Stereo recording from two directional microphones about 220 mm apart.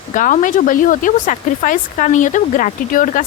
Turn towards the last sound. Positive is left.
turn(degrees=35)  # may be behind; listen again after turning